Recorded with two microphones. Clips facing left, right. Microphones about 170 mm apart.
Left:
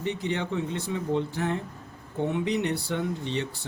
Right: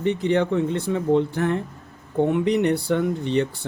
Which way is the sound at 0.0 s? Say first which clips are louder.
Right 9 dB; 60° right (ahead or behind).